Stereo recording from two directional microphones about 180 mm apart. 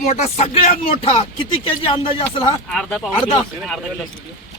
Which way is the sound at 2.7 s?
5° left (ahead or behind).